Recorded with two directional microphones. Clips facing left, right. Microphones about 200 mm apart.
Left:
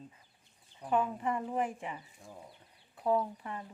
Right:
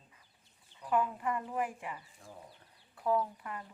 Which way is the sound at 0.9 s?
25° left (ahead or behind).